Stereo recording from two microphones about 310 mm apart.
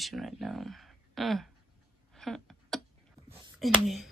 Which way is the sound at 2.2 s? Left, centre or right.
Centre.